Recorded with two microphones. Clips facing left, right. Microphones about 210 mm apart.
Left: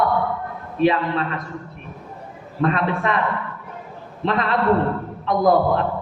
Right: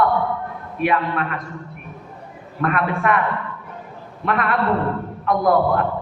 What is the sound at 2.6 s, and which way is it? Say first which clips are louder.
Speech: even; 25° left (ahead or behind).